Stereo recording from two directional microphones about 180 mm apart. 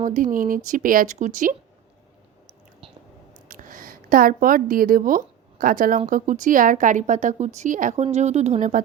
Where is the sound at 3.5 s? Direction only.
50° right (ahead or behind).